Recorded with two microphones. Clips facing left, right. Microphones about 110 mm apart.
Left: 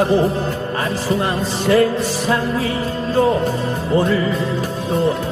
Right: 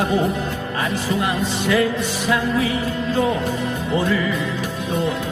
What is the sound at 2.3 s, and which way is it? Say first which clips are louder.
Music: right 1 dB; 35° left (ahead or behind).